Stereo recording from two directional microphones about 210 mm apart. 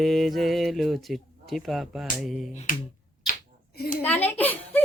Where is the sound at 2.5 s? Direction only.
35° left (ahead or behind).